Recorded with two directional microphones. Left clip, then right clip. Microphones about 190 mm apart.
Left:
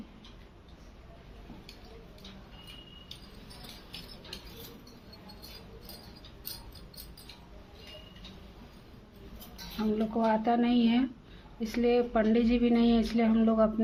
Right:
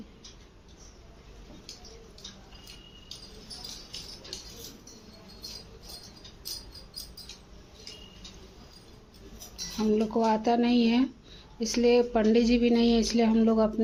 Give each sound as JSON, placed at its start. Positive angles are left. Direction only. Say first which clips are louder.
{"t": 9.7, "sound": "speech", "louder": "right 5 dB", "side_deg": -25}